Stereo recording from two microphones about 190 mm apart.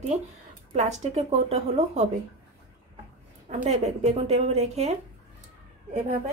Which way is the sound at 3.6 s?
35° right (ahead or behind).